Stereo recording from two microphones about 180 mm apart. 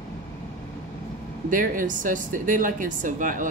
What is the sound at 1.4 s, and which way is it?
Speech, 50° right (ahead or behind).